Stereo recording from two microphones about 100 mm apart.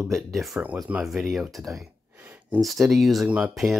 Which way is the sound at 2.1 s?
15° right (ahead or behind).